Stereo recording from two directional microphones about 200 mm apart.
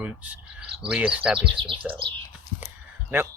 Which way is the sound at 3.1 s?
10° right (ahead or behind).